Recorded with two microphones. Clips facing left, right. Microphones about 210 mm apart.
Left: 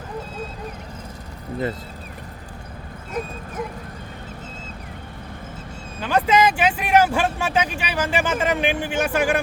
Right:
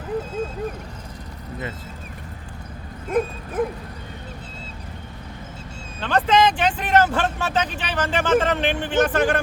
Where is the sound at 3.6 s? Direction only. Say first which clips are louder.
Right 7 dB; 55° right (ahead or behind).